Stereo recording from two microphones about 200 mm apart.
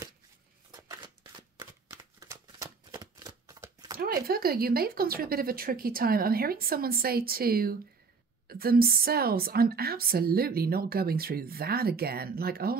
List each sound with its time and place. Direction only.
0.7 s shuffling cards: 20° right (ahead or behind)
4.0 s a woman's voice: 50° right (ahead or behind)